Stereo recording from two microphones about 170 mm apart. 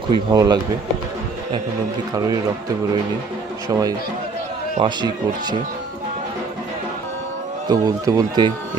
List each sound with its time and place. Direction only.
0.1 s speech: 25° right (ahead or behind)
3.7 s speech: 20° right (ahead or behind)
7.7 s speech: 20° right (ahead or behind)